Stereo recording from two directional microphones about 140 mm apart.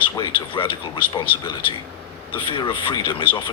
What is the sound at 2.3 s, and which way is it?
Speech, 35° left (ahead or behind).